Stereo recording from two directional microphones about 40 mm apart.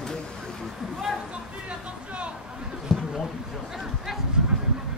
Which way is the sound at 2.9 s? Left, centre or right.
Centre.